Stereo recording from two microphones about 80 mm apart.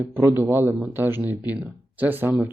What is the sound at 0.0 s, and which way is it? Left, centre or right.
A man's voice, right.